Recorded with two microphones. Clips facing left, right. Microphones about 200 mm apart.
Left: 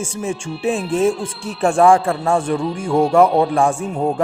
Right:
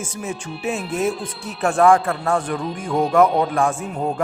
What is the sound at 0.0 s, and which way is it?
A man's voice, 30° left (ahead or behind).